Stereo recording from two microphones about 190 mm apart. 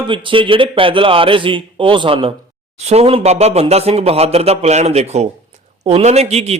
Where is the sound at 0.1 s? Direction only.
25° right (ahead or behind).